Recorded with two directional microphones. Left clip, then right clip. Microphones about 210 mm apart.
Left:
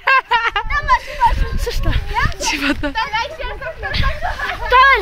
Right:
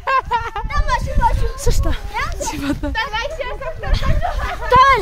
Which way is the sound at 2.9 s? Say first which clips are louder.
Left 2 dB; 35° right (ahead or behind).